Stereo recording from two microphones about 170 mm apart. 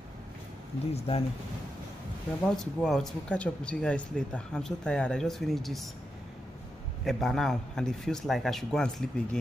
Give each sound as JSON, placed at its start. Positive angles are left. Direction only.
{"t": 0.9, "sound": "speech", "side_deg": 35}
{"t": 2.5, "sound": "speech", "side_deg": 5}
{"t": 7.1, "sound": "speech", "side_deg": 0}